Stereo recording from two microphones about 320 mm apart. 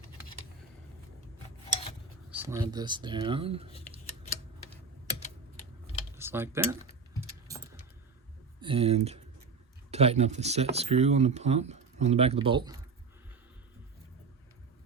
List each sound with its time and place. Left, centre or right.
2.3 s speech: centre
3.7 s speech: centre
6.1 s speech: centre
8.6 s speech: centre